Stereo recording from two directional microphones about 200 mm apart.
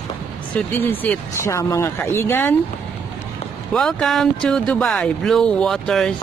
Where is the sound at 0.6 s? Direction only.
10° left (ahead or behind).